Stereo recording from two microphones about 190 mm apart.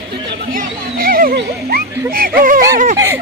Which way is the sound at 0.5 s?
50° right (ahead or behind).